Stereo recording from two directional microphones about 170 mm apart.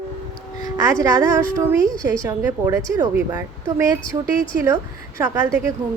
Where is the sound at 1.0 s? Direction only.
20° right (ahead or behind).